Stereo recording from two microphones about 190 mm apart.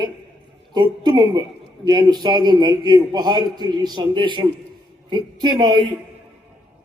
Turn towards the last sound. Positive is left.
turn(degrees=-25)  # may be behind; listen again after turning